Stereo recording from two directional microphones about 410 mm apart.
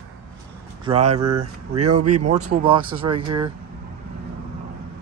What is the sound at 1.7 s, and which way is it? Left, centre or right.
Speech, right.